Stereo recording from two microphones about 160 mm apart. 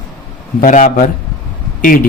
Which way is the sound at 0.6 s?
55° left (ahead or behind).